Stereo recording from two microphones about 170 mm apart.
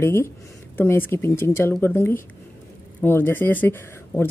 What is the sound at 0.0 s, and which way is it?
Speech, 15° left (ahead or behind).